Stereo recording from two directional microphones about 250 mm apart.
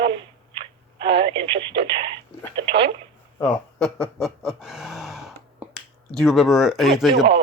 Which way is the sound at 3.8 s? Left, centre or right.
Centre.